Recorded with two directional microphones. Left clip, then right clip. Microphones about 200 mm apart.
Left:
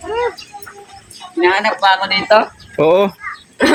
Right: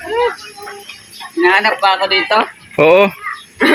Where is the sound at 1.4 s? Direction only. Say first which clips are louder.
Right 2 dB; 10° left (ahead or behind).